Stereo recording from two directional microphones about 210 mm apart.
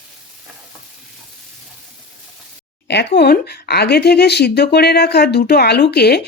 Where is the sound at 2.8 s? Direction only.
55° left (ahead or behind).